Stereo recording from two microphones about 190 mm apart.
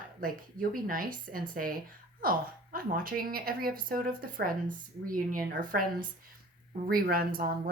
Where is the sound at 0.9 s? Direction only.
50° right (ahead or behind).